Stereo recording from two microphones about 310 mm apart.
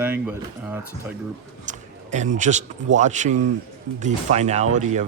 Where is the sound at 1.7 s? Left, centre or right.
Right.